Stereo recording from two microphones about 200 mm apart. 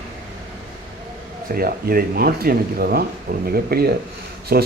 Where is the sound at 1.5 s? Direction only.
45° right (ahead or behind).